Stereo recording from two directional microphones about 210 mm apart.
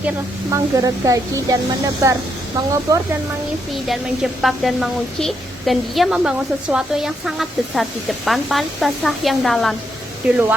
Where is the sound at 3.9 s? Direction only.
Centre (ahead or behind).